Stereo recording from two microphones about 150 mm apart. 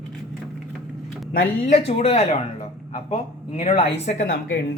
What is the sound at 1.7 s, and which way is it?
Speech, 45° left (ahead or behind).